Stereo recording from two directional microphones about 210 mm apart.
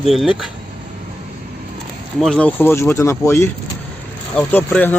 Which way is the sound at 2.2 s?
5° left (ahead or behind).